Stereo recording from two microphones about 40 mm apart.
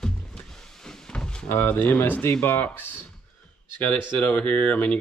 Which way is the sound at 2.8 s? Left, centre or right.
Left.